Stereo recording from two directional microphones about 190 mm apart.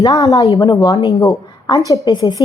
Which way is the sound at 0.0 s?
15° left (ahead or behind).